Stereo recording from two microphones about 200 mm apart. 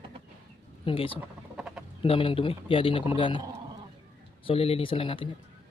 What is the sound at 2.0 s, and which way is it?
A man's voice, 25° left (ahead or behind).